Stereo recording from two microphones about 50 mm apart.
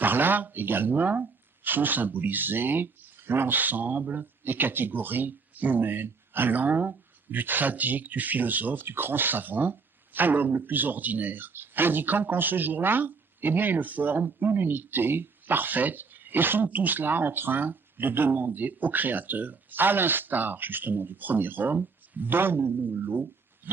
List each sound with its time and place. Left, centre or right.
0.0 s speech: right